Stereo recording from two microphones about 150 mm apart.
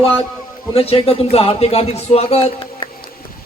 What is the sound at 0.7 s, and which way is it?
Speech, 40° left (ahead or behind).